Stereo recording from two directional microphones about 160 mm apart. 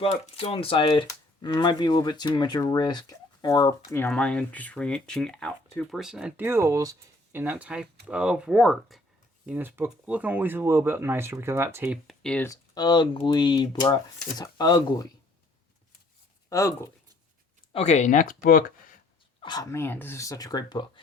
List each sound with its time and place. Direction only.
0.0 s speech: 35° left (ahead or behind); by 9.0 s centre (ahead or behind)
9.5 s speech: 10° right (ahead or behind)
12.0 s speech: 5° left (ahead or behind)
12.5 s speech: 25° left (ahead or behind)
16.5 s speech: 20° left (ahead or behind)
17.7 s speech: 40° left (ahead or behind); by 18.6 s 65° left (ahead or behind)
19.4 s a sound: 30° left (ahead or behind)
19.7 s speech: 15° left (ahead or behind)